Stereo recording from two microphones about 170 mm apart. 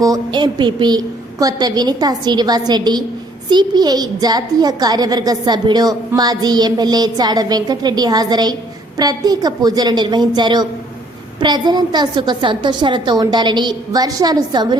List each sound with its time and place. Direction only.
0.0 s a woman's voice: 25° right (ahead or behind)